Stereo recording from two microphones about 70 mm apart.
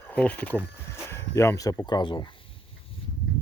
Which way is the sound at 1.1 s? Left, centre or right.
Left.